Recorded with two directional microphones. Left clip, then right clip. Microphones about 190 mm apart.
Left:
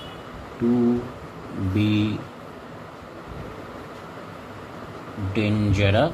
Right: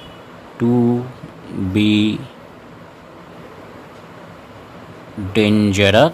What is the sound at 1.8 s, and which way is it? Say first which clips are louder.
Speech: right 8 dB; 50° right (ahead or behind).